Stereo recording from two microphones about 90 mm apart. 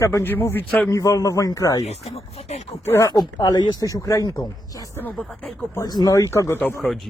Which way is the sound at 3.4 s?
45° left (ahead or behind).